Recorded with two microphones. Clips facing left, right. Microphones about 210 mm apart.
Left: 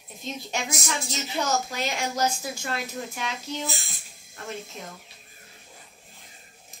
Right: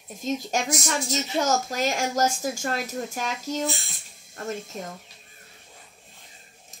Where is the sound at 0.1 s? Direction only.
45° right (ahead or behind).